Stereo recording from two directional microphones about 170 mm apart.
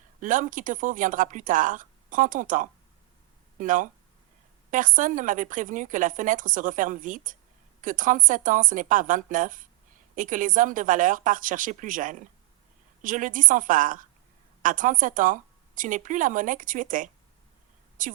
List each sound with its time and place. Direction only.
0.2 s a woman's voice: 50° right (ahead or behind)